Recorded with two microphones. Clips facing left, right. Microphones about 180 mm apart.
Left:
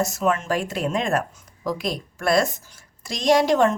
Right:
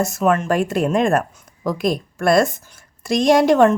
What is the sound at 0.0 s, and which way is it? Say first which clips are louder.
A woman's voice: right 4 dB; 55° right (ahead or behind).